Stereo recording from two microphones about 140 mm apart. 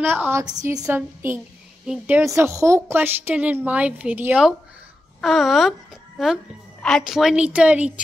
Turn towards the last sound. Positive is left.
turn(degrees=-10)  # may be behind; listen again after turning